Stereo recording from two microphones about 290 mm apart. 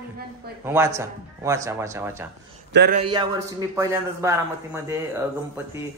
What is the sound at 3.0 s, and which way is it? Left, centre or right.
Speech, centre.